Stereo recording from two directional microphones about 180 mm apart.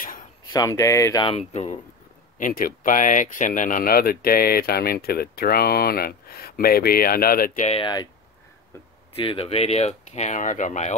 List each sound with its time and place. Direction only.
0.5 s speech: 20° left (ahead or behind)
1.2 s speech: 35° left (ahead or behind)
7.8 s speech: 25° left (ahead or behind)
9.1 s speech: 30° left (ahead or behind)